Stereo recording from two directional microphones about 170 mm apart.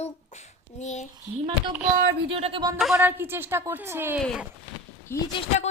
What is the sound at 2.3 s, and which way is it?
Speech, 35° right (ahead or behind).